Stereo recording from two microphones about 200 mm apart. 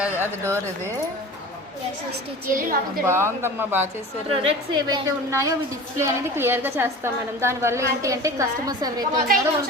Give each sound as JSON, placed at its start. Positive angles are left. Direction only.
{"t": 0.0, "sound": "speech", "side_deg": -10}
{"t": 2.5, "sound": "a woman's voice", "side_deg": -45}
{"t": 3.1, "sound": "a woman's voice", "side_deg": -10}
{"t": 4.3, "sound": "a woman's voice", "side_deg": -25}
{"t": 5.3, "sound": "a woman's voice", "side_deg": -15}